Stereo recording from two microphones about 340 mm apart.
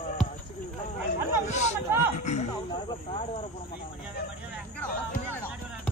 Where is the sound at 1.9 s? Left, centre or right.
Centre.